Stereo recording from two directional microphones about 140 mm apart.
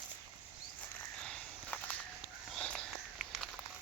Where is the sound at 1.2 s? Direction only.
10° left (ahead or behind).